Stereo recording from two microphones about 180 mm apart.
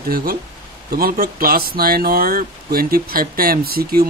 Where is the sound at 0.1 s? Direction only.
55° right (ahead or behind).